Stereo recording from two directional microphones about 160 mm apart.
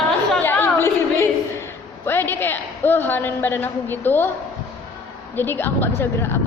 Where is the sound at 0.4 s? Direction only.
15° left (ahead or behind).